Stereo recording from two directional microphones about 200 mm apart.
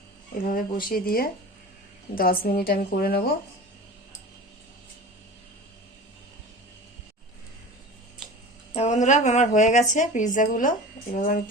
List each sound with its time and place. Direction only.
0.4 s a woman's voice: 45° left (ahead or behind)
8.7 s a woman's voice: 35° left (ahead or behind)